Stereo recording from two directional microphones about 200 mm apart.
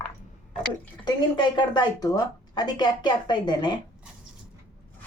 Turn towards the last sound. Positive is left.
turn(degrees=20)  # may be behind; listen again after turning